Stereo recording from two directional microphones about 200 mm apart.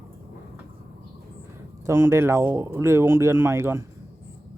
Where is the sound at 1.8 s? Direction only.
15° right (ahead or behind).